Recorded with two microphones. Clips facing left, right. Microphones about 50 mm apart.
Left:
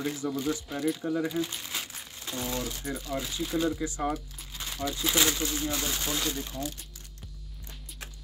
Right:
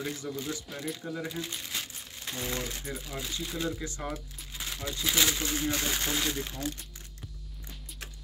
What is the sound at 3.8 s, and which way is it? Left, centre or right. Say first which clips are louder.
Speech: left 6 dB; centre.